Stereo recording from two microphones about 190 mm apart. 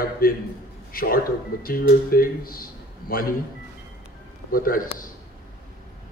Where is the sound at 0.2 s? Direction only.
50° left (ahead or behind).